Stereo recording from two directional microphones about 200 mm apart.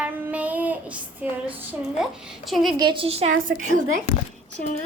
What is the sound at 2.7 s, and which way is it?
Speech, 25° right (ahead or behind).